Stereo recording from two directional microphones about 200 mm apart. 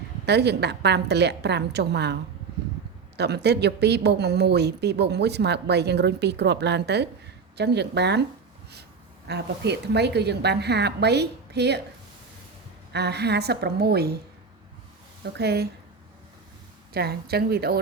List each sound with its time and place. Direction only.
0.3 s a woman's voice: 55° right (ahead or behind)
3.2 s a woman's voice: 55° right (ahead or behind)
9.2 s a woman's voice: 55° right (ahead or behind)
12.9 s a woman's voice: 55° right (ahead or behind)
15.2 s a woman's voice: 55° right (ahead or behind)
16.9 s speech: 50° right (ahead or behind)